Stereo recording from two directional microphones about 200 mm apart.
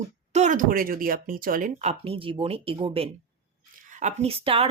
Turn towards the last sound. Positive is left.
turn(degrees=-30)  # may be behind; listen again after turning